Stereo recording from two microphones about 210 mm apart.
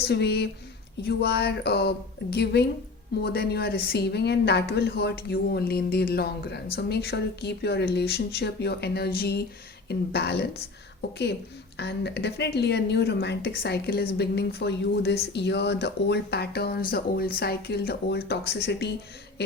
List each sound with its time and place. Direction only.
0.0 s speech: 50° left (ahead or behind)
11.8 s speech: 55° left (ahead or behind)